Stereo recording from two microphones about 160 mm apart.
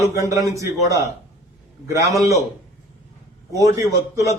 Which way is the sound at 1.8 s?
20° right (ahead or behind).